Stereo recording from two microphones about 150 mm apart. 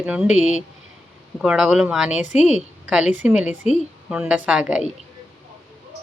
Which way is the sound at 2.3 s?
50° left (ahead or behind).